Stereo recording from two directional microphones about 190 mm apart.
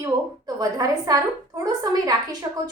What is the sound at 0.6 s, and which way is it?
A woman's voice, 20° right (ahead or behind).